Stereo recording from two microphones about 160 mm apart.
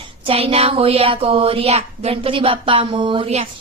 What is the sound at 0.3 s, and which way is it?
Speech, 35° right (ahead or behind).